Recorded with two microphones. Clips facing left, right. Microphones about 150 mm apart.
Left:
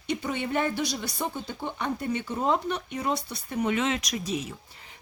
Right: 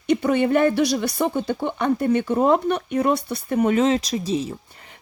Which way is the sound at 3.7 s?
35° right (ahead or behind).